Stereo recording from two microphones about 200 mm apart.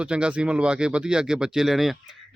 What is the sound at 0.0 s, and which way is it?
Speech, 5° right (ahead or behind).